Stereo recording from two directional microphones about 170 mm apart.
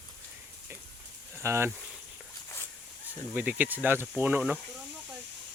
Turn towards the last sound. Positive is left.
turn(degrees=-10)  # may be behind; listen again after turning